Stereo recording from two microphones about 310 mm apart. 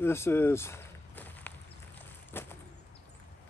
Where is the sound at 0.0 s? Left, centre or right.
Centre.